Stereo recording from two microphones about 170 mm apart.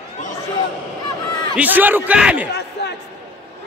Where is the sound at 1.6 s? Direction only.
10° right (ahead or behind).